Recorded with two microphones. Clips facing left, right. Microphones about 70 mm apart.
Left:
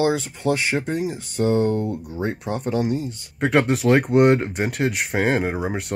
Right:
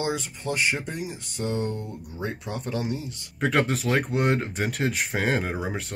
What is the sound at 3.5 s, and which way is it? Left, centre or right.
Speech, left.